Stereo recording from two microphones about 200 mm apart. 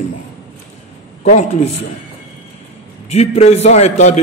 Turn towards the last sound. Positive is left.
turn(degrees=35)  # may be behind; listen again after turning